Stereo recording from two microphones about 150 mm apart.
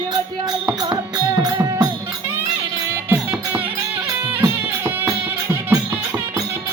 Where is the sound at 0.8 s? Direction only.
30° right (ahead or behind).